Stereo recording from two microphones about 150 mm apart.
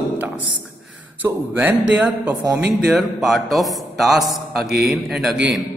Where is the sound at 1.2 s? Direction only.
20° right (ahead or behind); by 5.6 s centre (ahead or behind).